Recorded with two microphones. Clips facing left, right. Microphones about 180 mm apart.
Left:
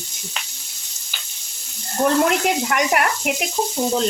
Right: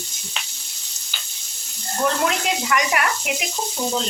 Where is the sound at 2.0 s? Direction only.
40° left (ahead or behind).